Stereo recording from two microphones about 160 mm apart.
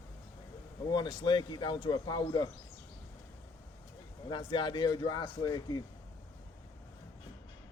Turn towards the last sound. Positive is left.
turn(degrees=25)  # may be behind; listen again after turning